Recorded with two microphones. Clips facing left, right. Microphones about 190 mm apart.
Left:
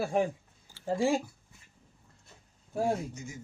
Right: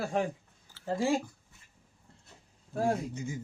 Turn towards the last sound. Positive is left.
turn(degrees=-30)  # may be behind; listen again after turning